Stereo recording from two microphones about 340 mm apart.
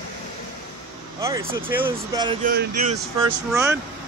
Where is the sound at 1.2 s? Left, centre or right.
Centre.